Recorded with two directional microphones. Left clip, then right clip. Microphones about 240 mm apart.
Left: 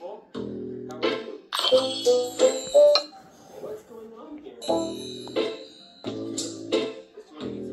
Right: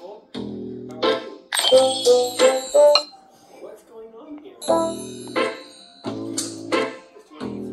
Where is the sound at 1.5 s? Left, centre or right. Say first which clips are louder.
Right 6 dB; right.